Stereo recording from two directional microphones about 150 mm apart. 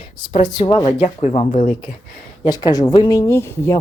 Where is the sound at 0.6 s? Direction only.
40° left (ahead or behind).